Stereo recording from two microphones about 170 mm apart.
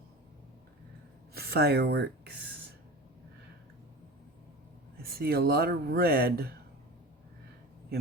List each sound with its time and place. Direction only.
1.3 s speech: 70° right (ahead or behind)
5.1 s speech: 65° right (ahead or behind)